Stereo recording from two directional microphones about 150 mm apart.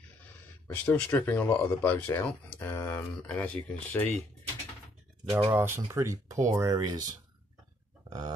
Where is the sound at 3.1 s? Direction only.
5° left (ahead or behind).